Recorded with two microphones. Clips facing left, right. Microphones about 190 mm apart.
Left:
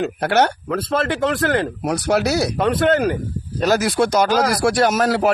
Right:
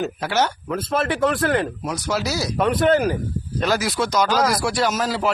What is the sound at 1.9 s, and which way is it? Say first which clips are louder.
Speech: left 9 dB; 65° left (ahead or behind).